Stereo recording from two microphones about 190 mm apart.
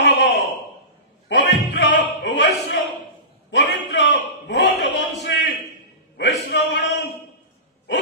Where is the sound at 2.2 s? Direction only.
70° left (ahead or behind).